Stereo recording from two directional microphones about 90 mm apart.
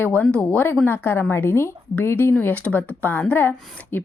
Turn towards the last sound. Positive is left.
turn(degrees=25)  # may be behind; listen again after turning